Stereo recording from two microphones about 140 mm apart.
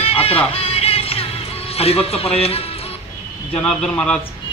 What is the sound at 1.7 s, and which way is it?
Speech, 45° left (ahead or behind).